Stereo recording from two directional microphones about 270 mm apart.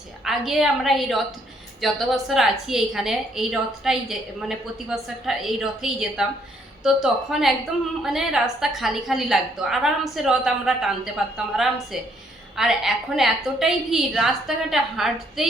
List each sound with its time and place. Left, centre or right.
0.3 s a woman's voice: centre